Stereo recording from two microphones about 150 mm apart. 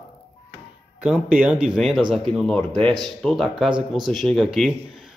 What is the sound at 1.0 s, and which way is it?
Speech, 10° right (ahead or behind).